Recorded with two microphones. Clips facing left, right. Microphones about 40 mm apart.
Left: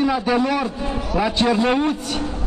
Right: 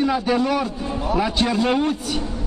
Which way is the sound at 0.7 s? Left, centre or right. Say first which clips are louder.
Left 2 dB; left.